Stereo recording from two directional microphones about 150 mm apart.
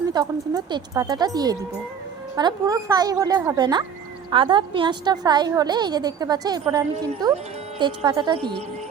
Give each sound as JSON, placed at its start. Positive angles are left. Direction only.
{"t": 0.1, "sound": "a woman's voice", "side_deg": -25}